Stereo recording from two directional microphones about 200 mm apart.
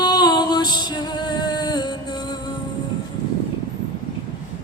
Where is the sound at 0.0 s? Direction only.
20° left (ahead or behind).